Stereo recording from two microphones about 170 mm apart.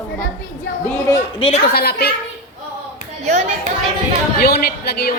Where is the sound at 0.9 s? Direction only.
15° left (ahead or behind).